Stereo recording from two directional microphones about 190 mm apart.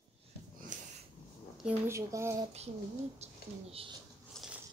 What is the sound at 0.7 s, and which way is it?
Snort, 40° right (ahead or behind).